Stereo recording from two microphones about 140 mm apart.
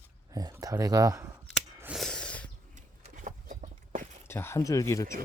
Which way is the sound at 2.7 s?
65° right (ahead or behind).